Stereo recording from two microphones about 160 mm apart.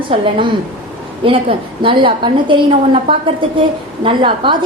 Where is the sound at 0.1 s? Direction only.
35° right (ahead or behind).